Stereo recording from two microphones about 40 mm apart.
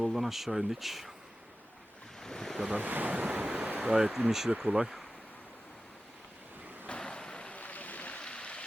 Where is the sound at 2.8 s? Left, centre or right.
Right.